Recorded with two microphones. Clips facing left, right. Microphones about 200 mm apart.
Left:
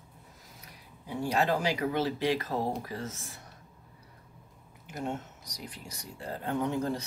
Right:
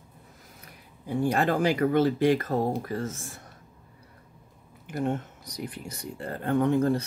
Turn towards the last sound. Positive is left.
turn(degrees=-55)  # may be behind; listen again after turning